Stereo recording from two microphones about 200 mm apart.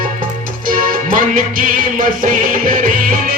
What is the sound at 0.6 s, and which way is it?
Music, 45° right (ahead or behind).